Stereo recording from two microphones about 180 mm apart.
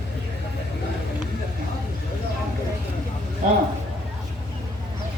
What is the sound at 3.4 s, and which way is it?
Speech, 45° right (ahead or behind).